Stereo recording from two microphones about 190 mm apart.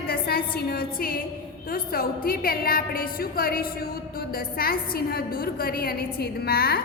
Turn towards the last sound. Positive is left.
turn(degrees=55)  # may be behind; listen again after turning